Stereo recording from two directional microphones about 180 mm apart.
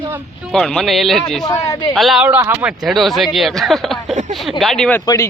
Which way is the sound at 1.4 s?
20° left (ahead or behind).